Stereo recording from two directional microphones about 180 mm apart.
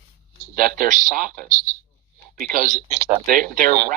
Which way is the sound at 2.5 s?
45° right (ahead or behind).